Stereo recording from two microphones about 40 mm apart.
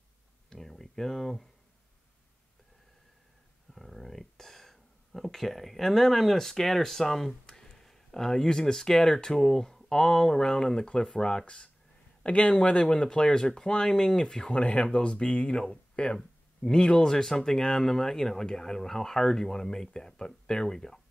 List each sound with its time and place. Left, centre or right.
0.5 s a sound: centre
3.7 s speech: centre
14.6 s speech: left